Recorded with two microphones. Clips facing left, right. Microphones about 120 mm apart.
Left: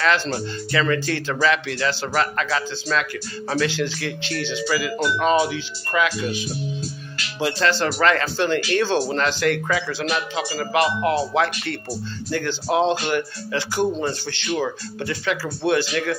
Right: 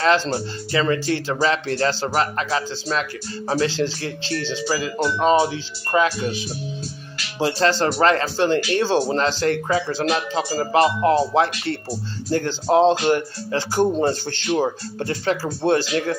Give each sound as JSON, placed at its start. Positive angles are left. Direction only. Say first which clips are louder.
{"t": 0.2, "sound": "speech", "louder": "right 1 dB", "side_deg": -30}
{"t": 1.7, "sound": "speech", "louder": "right 3 dB", "side_deg": -40}
{"t": 2.1, "sound": "speech", "louder": "right 1 dB", "side_deg": -25}